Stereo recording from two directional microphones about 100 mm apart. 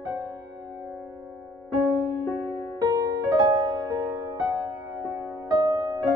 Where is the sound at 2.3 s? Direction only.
40° right (ahead or behind).